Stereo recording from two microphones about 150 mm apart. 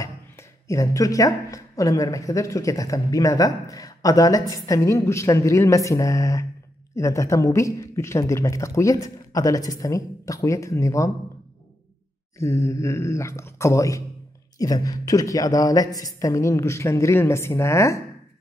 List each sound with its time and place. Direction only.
0.0 s speech: 20° left (ahead or behind)
12.4 s speech: 20° left (ahead or behind)